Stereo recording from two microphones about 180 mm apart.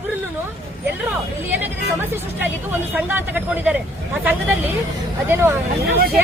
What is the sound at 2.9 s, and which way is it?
Speech, 10° right (ahead or behind).